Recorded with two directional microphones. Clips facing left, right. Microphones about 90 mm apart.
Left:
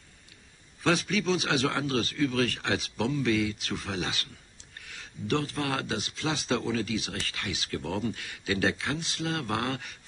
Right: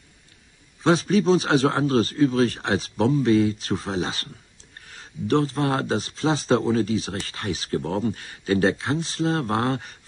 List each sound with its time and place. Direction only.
0.8 s speech: 35° right (ahead or behind)